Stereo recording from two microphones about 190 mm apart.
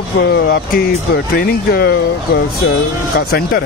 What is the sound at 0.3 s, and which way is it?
Speech, 55° left (ahead or behind).